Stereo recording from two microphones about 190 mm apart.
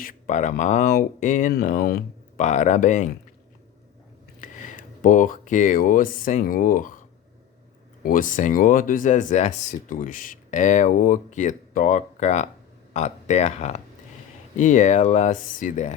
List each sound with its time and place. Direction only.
0.0 s speech: 45° left (ahead or behind)
2.4 s speech: 40° left (ahead or behind)
4.4 s speech: 45° left (ahead or behind)
8.0 s speech: 45° left (ahead or behind)